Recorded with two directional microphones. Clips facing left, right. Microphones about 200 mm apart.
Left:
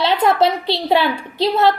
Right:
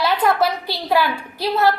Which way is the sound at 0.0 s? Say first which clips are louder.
Left 3 dB; 25° left (ahead or behind).